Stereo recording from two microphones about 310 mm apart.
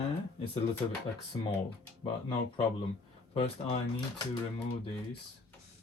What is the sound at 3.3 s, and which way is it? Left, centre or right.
Speech, centre.